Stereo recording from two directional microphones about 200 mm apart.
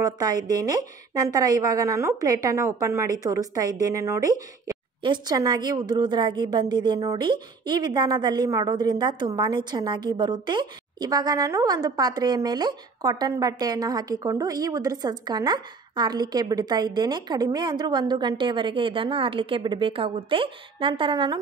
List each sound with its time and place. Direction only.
0.0 s a woman's voice: 20° right (ahead or behind)